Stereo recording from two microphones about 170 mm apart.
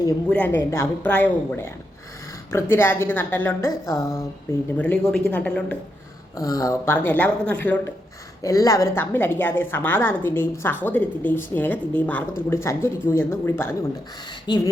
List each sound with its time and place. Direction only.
0.3 s a woman's voice: 10° left (ahead or behind)
4.8 s a woman's voice: 5° left (ahead or behind)
6.3 s a woman's voice: 20° left (ahead or behind)
14.4 s speech: 25° left (ahead or behind)